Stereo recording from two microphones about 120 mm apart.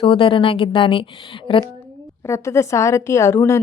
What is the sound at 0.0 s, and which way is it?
A woman's voice, 50° left (ahead or behind).